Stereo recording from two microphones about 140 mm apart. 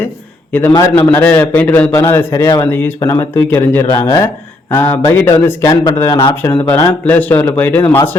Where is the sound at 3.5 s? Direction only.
15° left (ahead or behind).